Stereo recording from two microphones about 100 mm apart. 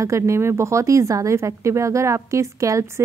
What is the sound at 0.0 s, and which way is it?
A woman's voice, 30° right (ahead or behind).